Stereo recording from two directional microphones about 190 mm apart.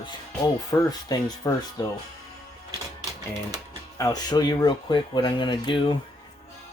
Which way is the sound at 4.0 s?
20° left (ahead or behind).